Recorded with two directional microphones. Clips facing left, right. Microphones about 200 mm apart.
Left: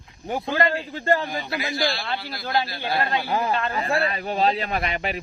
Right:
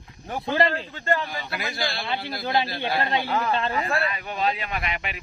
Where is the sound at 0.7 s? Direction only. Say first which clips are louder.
Left 3 dB; 35° left (ahead or behind).